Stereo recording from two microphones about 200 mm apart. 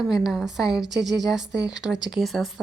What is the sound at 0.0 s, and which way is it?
A woman's voice, centre (ahead or behind).